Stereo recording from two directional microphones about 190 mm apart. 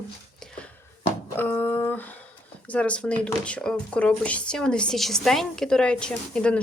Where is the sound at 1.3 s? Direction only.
10° left (ahead or behind).